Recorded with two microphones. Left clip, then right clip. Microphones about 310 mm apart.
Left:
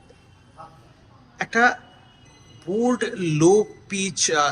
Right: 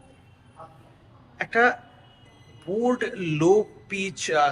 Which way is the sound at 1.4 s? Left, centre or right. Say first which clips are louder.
Left 2 dB; centre.